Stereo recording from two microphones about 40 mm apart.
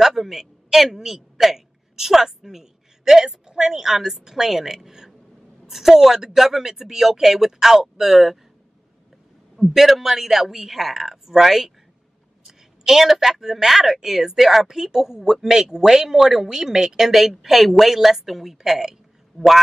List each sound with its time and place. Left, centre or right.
0.0 s a woman's voice: centre
9.6 s a man's voice: centre